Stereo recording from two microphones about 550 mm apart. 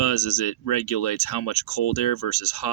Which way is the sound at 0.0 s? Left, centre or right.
Left.